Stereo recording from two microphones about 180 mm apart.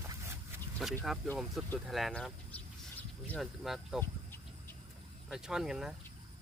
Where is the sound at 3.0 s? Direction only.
10° left (ahead or behind).